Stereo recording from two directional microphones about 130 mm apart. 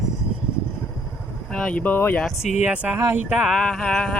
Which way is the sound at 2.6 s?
10° right (ahead or behind).